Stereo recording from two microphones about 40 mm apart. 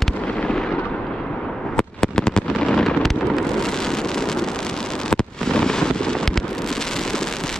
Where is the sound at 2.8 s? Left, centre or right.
Centre.